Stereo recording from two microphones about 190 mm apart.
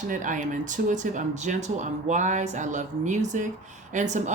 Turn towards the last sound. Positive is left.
turn(degrees=-40)  # may be behind; listen again after turning